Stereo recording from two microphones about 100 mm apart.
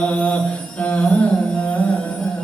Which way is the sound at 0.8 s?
10° left (ahead or behind).